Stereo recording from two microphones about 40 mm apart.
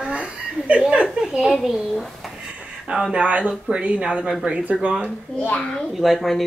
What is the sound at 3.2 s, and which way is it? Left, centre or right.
Speech, right.